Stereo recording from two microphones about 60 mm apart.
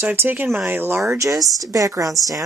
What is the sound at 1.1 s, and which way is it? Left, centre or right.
Speech, right.